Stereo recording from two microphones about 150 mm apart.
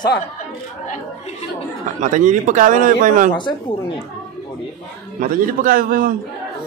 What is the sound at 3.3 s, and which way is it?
Speech, 30° left (ahead or behind).